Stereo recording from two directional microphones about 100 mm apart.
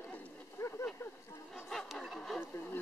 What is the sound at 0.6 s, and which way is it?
Speech, 30° left (ahead or behind).